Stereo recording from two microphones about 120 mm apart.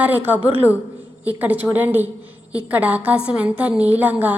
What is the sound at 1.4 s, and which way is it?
A woman's voice, 15° right (ahead or behind).